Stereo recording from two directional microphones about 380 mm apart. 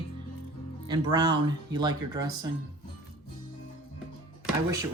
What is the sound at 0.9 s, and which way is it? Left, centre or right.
Speech, centre.